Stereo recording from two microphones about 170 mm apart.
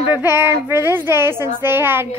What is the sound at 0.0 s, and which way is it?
A woman's voice, 10° right (ahead or behind).